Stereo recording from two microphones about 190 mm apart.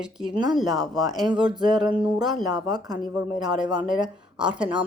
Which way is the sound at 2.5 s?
20° right (ahead or behind).